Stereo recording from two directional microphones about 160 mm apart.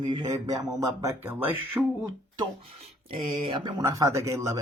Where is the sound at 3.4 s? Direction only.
35° right (ahead or behind).